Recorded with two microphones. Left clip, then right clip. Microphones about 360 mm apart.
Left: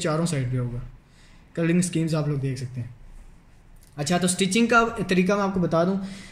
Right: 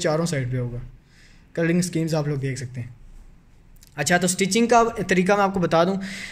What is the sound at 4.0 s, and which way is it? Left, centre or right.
Speech, right.